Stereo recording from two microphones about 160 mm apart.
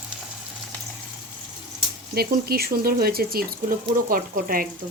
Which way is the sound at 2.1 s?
75° right (ahead or behind).